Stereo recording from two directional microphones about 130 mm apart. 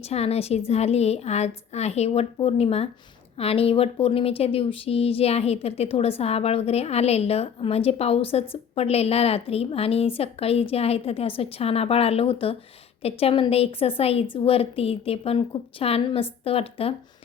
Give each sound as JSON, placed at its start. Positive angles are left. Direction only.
{"t": 0.1, "sound": "speech", "side_deg": 55}